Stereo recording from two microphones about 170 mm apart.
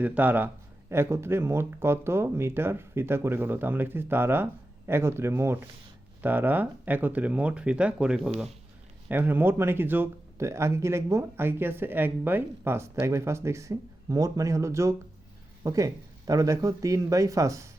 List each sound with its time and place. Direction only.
0.0 s speech: 10° right (ahead or behind)